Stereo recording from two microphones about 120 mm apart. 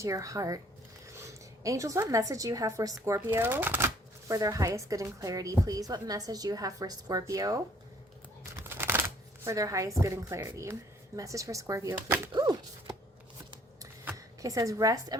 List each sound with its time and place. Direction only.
0.0 s a woman's voice: 25° right (ahead or behind)
8.5 s shuffling cards: 20° right (ahead or behind)
11.2 s speech: 25° right (ahead or behind)
12.3 s dog: 35° right (ahead or behind)
14.0 s speech: 25° right (ahead or behind)